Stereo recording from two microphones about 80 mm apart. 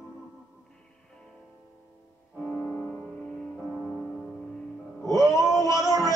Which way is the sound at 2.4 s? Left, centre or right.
Centre.